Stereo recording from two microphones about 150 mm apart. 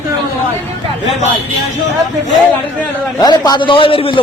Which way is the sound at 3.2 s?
25° left (ahead or behind).